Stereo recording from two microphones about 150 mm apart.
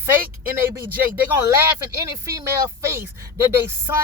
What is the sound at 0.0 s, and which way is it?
Speech, 15° right (ahead or behind).